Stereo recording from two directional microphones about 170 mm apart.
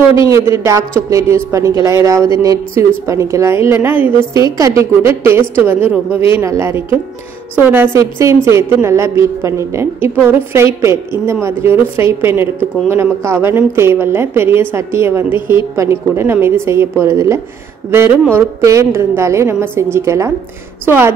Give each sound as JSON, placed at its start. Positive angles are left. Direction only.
{"t": 0.1, "sound": "a woman's voice", "side_deg": -15}